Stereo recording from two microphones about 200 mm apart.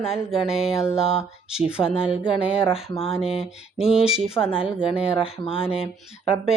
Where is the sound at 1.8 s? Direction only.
15° left (ahead or behind).